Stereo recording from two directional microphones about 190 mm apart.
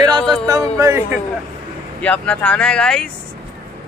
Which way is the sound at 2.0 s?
5° left (ahead or behind).